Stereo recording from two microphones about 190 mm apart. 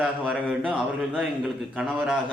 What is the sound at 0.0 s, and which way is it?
A man's voice, 5° right (ahead or behind).